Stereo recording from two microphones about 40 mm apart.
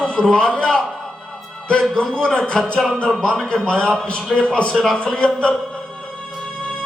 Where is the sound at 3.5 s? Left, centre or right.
Left.